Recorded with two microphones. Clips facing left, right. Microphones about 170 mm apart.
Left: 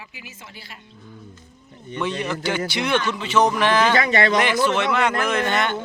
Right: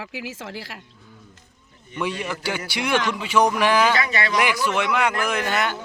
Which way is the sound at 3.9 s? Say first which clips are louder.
Left 5 dB; 45° left (ahead or behind).